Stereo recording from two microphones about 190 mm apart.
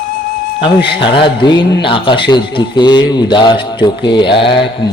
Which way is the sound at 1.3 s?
25° left (ahead or behind).